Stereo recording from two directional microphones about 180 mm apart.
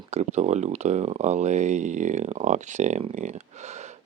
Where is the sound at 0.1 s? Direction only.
40° right (ahead or behind).